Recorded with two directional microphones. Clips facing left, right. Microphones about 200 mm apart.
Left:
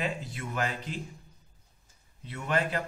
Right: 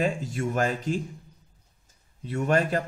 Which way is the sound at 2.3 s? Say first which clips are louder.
Right 6 dB; 45° right (ahead or behind).